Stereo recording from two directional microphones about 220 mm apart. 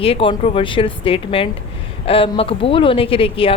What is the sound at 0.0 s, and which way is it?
Speech, 25° left (ahead or behind).